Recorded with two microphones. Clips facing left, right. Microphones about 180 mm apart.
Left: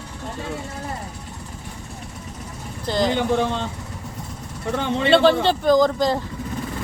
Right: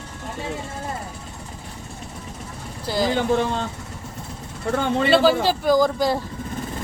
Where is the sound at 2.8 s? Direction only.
5° right (ahead or behind).